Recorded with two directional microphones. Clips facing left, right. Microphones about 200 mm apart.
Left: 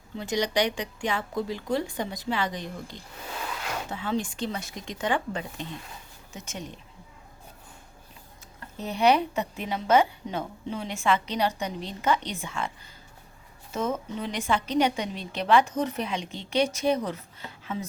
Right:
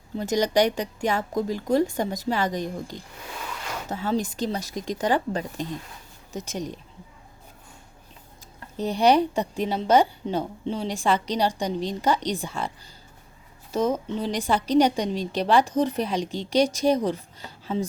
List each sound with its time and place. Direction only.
0.2 s a woman's voice: 45° right (ahead or behind)
8.8 s a woman's voice: 35° right (ahead or behind)